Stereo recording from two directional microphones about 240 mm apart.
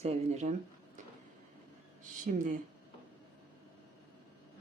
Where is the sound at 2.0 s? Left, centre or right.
Right.